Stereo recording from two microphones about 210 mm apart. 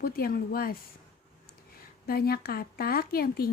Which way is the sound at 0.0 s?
45° left (ahead or behind).